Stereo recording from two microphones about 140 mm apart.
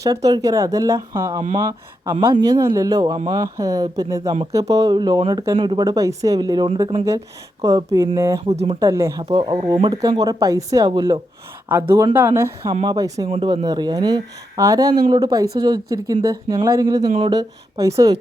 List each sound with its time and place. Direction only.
0.0 s speech: 25° right (ahead or behind)
2.6 s speech: 25° right (ahead or behind)
8.4 s speech: 40° right (ahead or behind)
8.8 s speech: 20° right (ahead or behind)
9.3 s speech: 35° right (ahead or behind)
11.7 s speech: 15° right (ahead or behind)
12.8 s speech: 30° right (ahead or behind)
13.2 s speech: 40° right (ahead or behind); by 18.2 s 25° right (ahead or behind)